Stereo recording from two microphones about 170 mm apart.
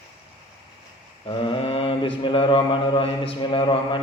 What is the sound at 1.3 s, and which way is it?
Mantra, 30° left (ahead or behind).